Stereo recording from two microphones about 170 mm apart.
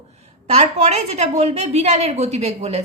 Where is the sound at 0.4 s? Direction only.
40° right (ahead or behind).